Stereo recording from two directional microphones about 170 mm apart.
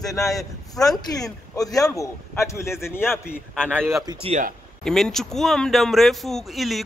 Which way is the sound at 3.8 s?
15° right (ahead or behind).